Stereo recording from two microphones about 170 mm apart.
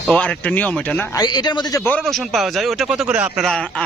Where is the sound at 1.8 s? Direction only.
5° left (ahead or behind).